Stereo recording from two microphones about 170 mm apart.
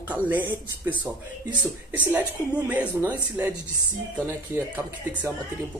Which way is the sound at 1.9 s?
10° right (ahead or behind).